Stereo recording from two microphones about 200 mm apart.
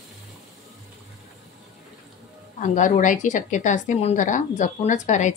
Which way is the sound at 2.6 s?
40° left (ahead or behind).